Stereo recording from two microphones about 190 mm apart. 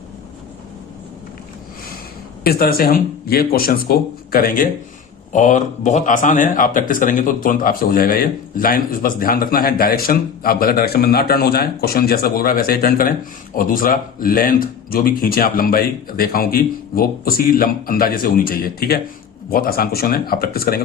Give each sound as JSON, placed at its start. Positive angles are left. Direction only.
{"t": 2.4, "sound": "speech", "side_deg": 55}